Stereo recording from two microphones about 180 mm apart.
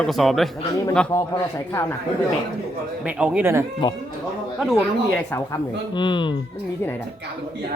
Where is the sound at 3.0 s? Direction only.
5° right (ahead or behind).